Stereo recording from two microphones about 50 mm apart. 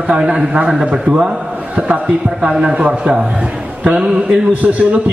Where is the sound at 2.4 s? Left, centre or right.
Centre.